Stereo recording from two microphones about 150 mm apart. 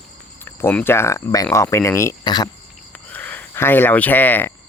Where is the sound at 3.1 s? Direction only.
10° left (ahead or behind).